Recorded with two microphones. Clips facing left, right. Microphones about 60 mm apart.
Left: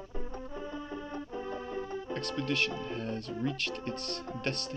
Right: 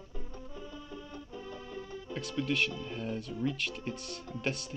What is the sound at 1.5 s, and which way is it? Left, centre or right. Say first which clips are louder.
Music: left 5 dB; left.